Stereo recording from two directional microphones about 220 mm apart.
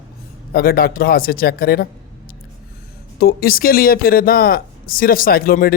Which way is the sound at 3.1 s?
40° left (ahead or behind).